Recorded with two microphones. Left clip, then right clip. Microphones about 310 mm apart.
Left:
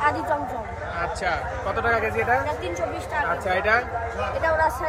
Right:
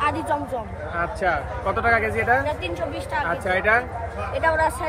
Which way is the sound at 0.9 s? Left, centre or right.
Right.